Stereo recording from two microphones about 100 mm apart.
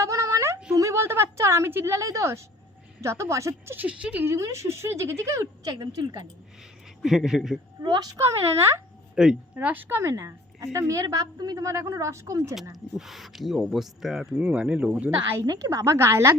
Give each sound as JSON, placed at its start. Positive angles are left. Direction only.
{"t": 0.0, "sound": "a sound", "side_deg": -30}
{"t": 3.0, "sound": "speech", "side_deg": -30}
{"t": 3.8, "sound": "speech", "side_deg": -15}
{"t": 5.7, "sound": "a woman's voice", "side_deg": -45}
{"t": 7.0, "sound": "speech", "side_deg": -5}
{"t": 7.9, "sound": "a woman's voice", "side_deg": -40}
{"t": 9.1, "sound": "speech", "side_deg": -5}
{"t": 9.6, "sound": "a woman's voice", "side_deg": -15}
{"t": 12.7, "sound": "speech", "side_deg": 0}
{"t": 15.4, "sound": "a woman's voice", "side_deg": -35}